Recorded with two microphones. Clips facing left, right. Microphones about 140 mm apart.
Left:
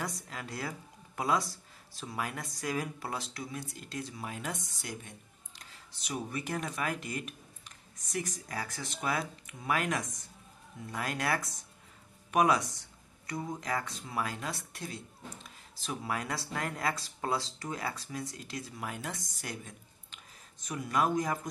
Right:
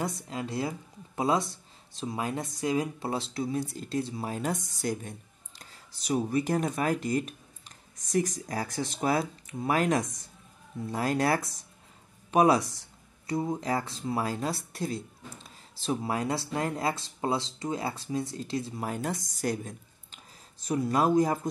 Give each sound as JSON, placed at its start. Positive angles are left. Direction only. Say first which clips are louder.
{"t": 0.0, "sound": "speech", "louder": "right 6 dB", "side_deg": -25}